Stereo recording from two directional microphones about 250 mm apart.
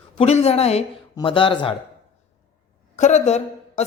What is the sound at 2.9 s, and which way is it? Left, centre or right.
Speech, left.